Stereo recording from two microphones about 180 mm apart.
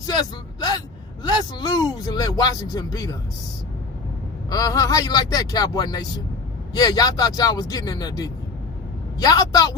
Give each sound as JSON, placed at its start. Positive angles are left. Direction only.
{"t": 0.1, "sound": "a sound", "side_deg": 25}
{"t": 1.2, "sound": "speech", "side_deg": 25}
{"t": 4.4, "sound": "a man's voice", "side_deg": 20}